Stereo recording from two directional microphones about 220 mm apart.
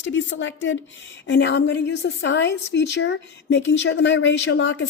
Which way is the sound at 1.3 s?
55° left (ahead or behind).